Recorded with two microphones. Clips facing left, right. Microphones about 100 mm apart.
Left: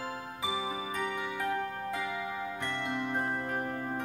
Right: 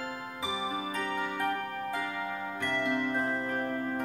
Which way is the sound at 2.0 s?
20° left (ahead or behind).